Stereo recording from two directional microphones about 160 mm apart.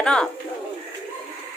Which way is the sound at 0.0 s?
5° left (ahead or behind).